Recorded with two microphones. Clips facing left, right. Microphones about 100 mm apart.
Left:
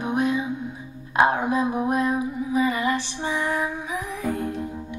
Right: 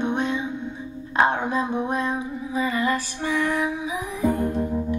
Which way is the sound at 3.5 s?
Centre (ahead or behind).